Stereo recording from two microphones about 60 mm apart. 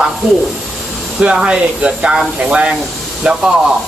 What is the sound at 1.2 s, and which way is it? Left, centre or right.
Speech, centre.